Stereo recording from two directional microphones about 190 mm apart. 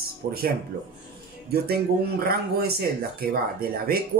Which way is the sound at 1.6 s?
55° right (ahead or behind).